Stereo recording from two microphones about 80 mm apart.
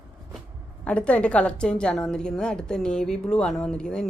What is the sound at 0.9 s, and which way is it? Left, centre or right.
A woman's voice, centre.